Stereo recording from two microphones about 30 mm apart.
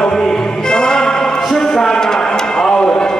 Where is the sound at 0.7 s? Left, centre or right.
Left.